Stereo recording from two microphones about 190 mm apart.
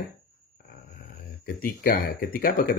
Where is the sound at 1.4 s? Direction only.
50° left (ahead or behind).